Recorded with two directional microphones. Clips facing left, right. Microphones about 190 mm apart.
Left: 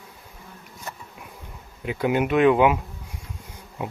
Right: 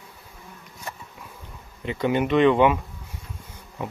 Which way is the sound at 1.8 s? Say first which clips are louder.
Even; 5° left (ahead or behind).